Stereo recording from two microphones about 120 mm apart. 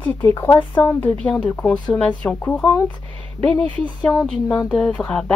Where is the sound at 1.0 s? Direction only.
10° left (ahead or behind).